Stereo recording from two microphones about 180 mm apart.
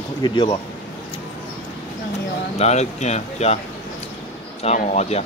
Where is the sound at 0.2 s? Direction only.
25° left (ahead or behind).